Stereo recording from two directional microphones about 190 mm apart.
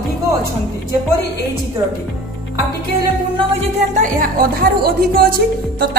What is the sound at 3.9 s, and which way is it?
Speech, 50° right (ahead or behind).